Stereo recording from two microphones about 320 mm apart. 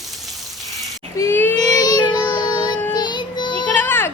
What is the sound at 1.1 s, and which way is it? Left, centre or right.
Child singing, centre.